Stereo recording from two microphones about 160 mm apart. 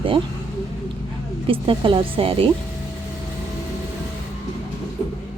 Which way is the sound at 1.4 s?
35° right (ahead or behind).